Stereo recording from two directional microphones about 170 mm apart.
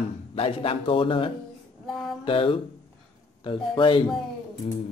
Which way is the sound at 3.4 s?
30° left (ahead or behind).